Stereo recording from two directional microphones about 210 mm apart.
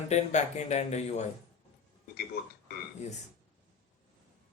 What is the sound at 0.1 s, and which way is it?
Speech, 35° left (ahead or behind).